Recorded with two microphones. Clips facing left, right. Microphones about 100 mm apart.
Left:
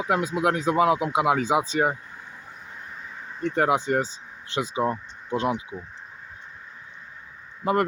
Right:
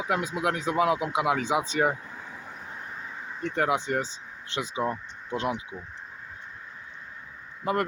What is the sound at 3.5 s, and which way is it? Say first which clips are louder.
A man's voice: left 4 dB; 30° left (ahead or behind).